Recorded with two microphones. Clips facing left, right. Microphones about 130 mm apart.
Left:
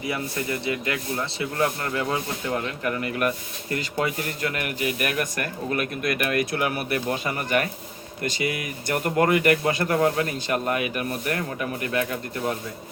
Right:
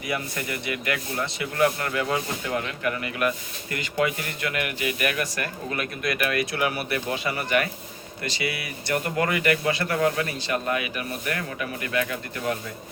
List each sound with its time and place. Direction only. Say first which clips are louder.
0.1 s speech: even; 30° left (ahead or behind)
2.8 s speech: left 1 dB; 40° left (ahead or behind)